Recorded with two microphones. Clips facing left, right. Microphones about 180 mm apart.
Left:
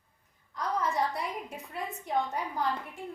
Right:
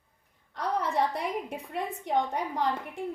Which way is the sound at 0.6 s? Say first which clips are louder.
Right 2 dB; 65° right (ahead or behind).